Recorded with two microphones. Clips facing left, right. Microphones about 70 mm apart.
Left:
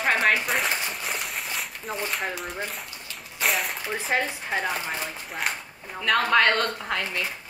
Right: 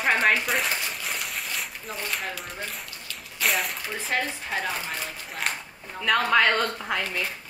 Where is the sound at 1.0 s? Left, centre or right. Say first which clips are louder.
Left 1 dB; centre.